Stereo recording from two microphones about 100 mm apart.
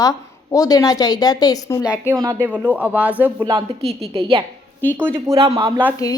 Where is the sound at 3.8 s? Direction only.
75° right (ahead or behind).